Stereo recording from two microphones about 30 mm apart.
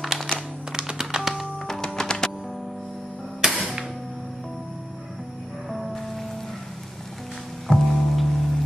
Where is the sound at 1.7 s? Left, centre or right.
Centre.